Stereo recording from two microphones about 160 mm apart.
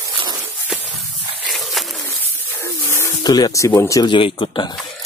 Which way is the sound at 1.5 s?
Centre (ahead or behind).